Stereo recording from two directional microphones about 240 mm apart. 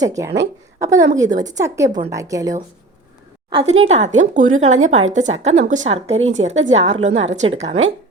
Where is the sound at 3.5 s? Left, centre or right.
Right.